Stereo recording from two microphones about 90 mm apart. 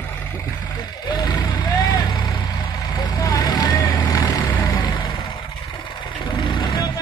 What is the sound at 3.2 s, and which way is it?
Vehicle, 50° left (ahead or behind).